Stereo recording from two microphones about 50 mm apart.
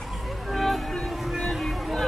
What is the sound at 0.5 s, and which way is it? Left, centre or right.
Music, centre.